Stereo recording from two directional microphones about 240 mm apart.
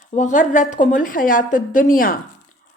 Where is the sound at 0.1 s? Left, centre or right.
Left.